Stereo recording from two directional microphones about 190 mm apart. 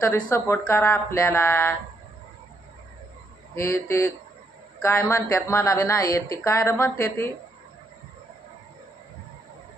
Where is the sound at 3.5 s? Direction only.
15° left (ahead or behind).